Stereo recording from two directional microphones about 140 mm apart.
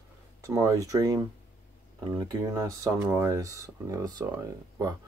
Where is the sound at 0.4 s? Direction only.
20° right (ahead or behind).